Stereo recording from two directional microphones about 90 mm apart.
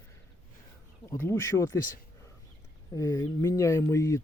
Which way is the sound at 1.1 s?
25° left (ahead or behind).